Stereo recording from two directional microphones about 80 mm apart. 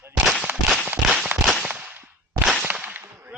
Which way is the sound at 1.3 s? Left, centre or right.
Right.